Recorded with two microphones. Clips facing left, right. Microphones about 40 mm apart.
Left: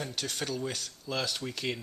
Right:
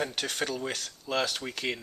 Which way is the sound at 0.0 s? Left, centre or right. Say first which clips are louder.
Right 4 dB; right.